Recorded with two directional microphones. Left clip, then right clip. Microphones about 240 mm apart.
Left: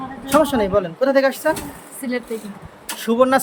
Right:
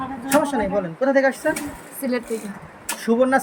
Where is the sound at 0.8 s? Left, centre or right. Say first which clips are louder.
Left 2 dB; centre.